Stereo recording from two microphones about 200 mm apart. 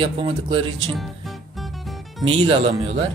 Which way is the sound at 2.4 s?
30° right (ahead or behind).